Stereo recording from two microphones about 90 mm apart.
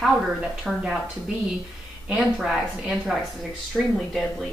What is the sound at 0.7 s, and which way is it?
Speech, centre (ahead or behind).